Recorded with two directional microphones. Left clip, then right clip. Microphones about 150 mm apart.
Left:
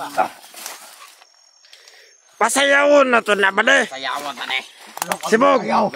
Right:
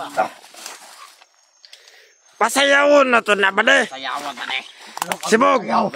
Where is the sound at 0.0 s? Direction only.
20° right (ahead or behind).